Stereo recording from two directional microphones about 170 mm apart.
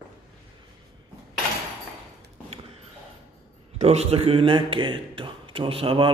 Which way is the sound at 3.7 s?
40° right (ahead or behind).